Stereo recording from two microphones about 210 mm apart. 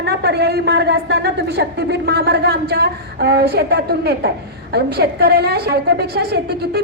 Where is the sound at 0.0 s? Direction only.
50° right (ahead or behind).